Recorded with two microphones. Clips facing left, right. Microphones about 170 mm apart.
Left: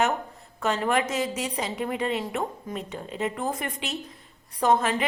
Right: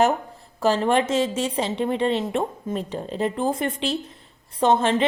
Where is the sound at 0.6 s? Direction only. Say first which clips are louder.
Right 5 dB; 30° right (ahead or behind).